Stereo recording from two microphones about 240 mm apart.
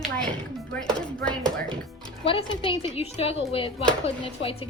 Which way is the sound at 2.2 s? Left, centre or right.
Left.